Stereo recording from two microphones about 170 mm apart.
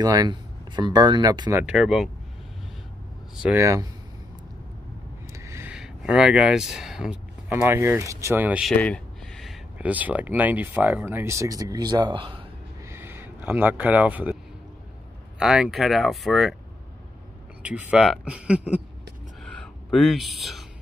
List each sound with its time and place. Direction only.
0.0 s speech: 20° right (ahead or behind)
1.5 s speech: 10° right (ahead or behind)
3.4 s speech: 15° right (ahead or behind)
5.3 s a sound: 15° right (ahead or behind)
5.8 s speech: 5° right (ahead or behind)
8.7 s speech: 5° left (ahead or behind); by 12.4 s 30° right (ahead or behind)
12.8 s a sound: 10° right (ahead or behind)
15.3 s speech: 5° right (ahead or behind)
17.6 s speech: 5° right (ahead or behind)
19.4 s a sound: 5° left (ahead or behind)